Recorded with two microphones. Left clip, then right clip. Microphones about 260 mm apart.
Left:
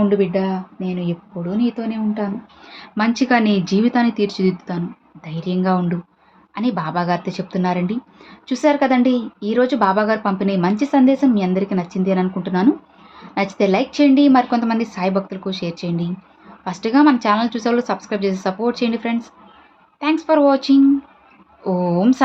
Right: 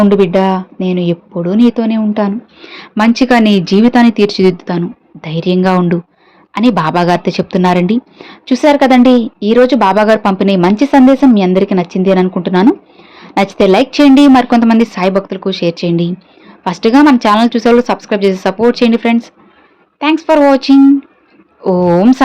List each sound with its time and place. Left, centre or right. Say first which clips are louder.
0.1 s speech: right 9 dB; right